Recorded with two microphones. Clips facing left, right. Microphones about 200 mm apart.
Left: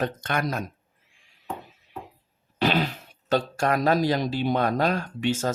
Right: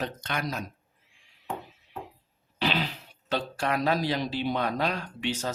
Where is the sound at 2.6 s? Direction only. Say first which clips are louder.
Left 5 dB; 45° left (ahead or behind).